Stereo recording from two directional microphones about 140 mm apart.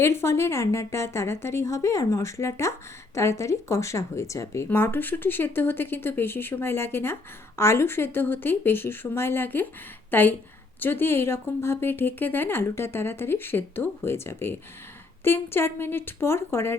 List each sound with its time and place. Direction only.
0.0 s a woman's voice: 20° left (ahead or behind)